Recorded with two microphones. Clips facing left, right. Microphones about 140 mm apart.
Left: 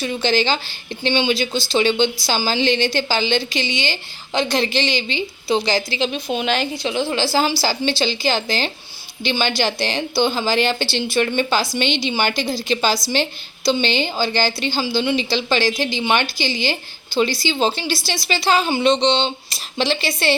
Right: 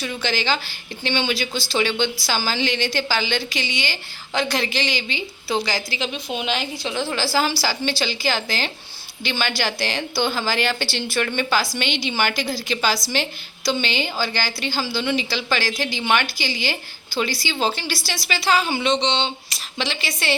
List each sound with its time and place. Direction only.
0.0 s speech: 25° left (ahead or behind)